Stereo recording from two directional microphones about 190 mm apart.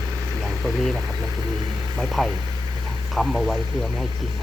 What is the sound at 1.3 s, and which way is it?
Vehicle, 20° right (ahead or behind).